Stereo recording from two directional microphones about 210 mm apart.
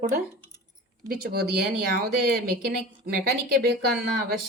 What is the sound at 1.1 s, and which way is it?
Speech, 50° right (ahead or behind).